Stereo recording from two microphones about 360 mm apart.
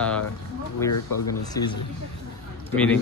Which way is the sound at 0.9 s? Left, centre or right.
Left.